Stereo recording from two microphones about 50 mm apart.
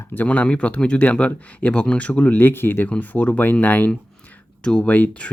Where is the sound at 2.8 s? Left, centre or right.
Left.